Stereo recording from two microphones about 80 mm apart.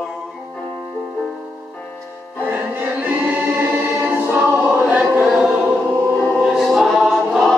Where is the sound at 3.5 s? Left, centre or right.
Right.